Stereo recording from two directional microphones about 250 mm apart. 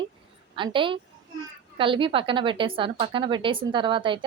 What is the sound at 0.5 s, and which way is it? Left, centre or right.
Speech, centre.